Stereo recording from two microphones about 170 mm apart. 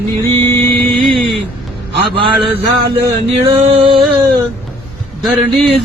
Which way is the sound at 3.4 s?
30° right (ahead or behind).